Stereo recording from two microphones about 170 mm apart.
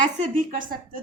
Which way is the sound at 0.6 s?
55° right (ahead or behind).